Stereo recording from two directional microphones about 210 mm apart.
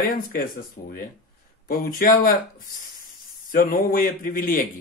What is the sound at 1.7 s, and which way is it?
Speech, 40° left (ahead or behind).